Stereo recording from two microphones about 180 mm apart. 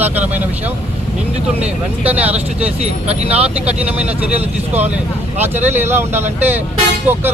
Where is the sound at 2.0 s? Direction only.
10° right (ahead or behind).